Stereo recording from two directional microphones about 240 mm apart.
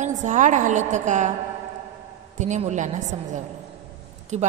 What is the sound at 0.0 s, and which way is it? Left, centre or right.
A woman's voice, right.